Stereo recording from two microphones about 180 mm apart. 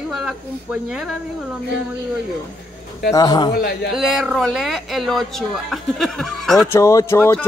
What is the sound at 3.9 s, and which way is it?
Speech, centre (ahead or behind).